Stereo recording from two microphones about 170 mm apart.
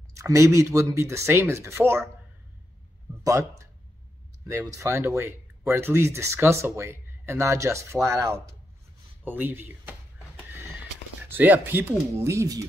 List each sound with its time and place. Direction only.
0.1 s speech: 20° right (ahead or behind)
3.3 s speech: 20° right (ahead or behind)
11.2 s speech: 10° right (ahead or behind)